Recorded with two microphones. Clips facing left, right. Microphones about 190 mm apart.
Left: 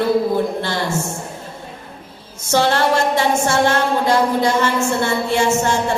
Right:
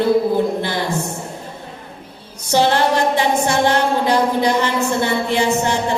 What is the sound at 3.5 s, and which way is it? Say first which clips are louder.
Speech: even; 15° right (ahead or behind).